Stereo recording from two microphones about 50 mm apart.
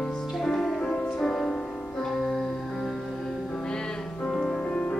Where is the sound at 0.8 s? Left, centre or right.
Centre.